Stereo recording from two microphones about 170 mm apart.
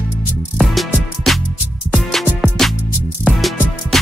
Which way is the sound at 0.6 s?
Centre (ahead or behind).